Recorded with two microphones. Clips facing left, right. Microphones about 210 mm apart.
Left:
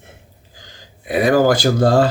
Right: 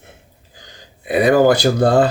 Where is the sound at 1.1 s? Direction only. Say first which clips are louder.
Right 2 dB; 20° right (ahead or behind).